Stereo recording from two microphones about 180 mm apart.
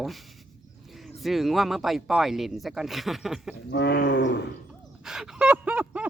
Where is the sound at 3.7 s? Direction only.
70° left (ahead or behind).